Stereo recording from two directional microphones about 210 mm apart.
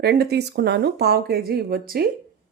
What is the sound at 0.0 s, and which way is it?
Speech, 50° right (ahead or behind).